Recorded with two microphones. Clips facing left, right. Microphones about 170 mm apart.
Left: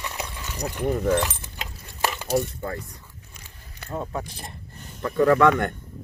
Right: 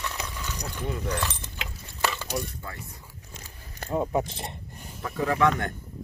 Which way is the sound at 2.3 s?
50° left (ahead or behind).